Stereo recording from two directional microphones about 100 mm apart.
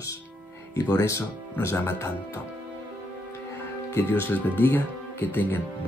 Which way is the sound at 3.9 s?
20° left (ahead or behind).